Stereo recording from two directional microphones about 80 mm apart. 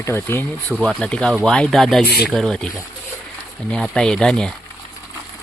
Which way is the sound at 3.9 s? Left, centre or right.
Centre.